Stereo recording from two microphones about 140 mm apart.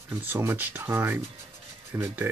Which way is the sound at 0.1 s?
15° right (ahead or behind).